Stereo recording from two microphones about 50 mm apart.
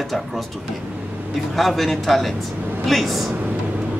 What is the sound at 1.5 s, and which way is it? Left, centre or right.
Speech, centre.